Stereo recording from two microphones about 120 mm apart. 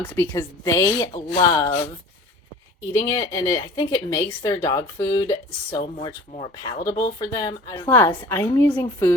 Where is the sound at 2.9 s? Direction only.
30° left (ahead or behind).